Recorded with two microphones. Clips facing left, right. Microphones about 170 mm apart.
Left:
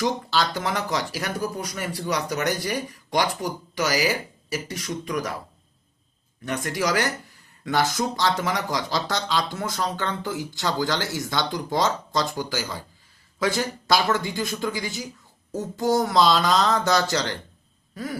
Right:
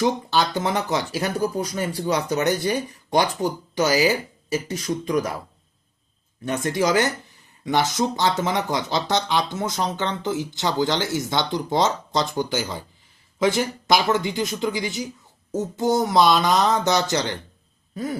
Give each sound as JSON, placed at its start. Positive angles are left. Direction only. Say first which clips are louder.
{"t": 0.0, "sound": "speech", "louder": "right 3 dB", "side_deg": -20}
{"t": 6.4, "sound": "speech", "louder": "right 4 dB", "side_deg": -25}
{"t": 17.9, "sound": "throat clearing", "louder": "right 4 dB", "side_deg": -25}